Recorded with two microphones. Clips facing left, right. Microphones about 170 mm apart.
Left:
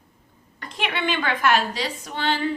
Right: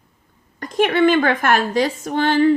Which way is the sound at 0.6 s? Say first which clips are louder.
Right 12 dB; 45° right (ahead or behind).